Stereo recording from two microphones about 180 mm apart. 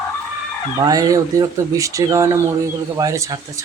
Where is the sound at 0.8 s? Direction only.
20° right (ahead or behind).